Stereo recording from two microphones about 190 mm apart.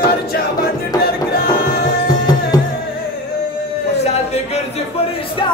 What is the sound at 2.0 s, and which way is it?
Music, 20° left (ahead or behind).